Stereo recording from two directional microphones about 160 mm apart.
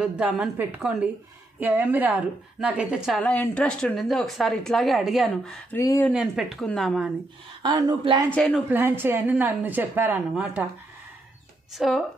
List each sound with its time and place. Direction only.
0.0 s a woman's voice: 5° right (ahead or behind)
3.2 s speech: 10° left (ahead or behind)
5.8 s speech: 15° left (ahead or behind)
6.1 s speech: 5° right (ahead or behind)
7.6 s a woman's voice: 25° right (ahead or behind)
8.3 s speech: 10° left (ahead or behind)
8.5 s a woman's voice: 10° right (ahead or behind)
11.7 s speech: centre (ahead or behind)